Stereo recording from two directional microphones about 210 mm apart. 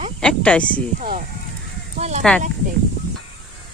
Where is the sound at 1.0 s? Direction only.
40° right (ahead or behind).